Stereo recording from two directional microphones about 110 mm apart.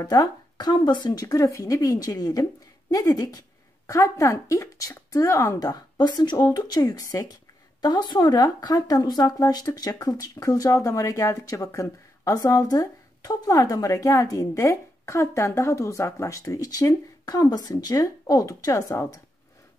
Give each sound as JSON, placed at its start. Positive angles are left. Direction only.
{"t": 0.1, "sound": "a woman's voice", "side_deg": 35}